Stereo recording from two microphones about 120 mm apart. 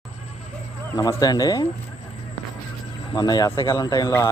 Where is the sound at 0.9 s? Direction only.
30° left (ahead or behind).